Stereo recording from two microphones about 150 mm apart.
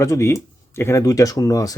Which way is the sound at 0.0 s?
20° left (ahead or behind).